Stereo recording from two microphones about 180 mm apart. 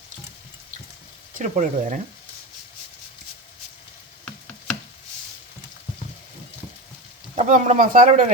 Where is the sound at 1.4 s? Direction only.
45° right (ahead or behind).